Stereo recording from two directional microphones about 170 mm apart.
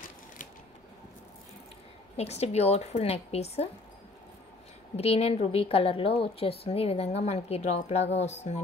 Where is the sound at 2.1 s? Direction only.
40° left (ahead or behind).